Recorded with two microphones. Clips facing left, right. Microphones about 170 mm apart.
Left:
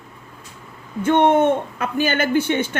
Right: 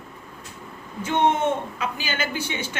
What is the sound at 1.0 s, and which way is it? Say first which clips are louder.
A woman's voice: left 6 dB; 55° left (ahead or behind).